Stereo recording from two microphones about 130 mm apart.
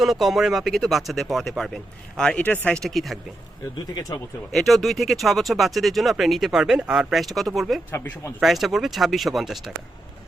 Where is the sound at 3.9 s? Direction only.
30° left (ahead or behind).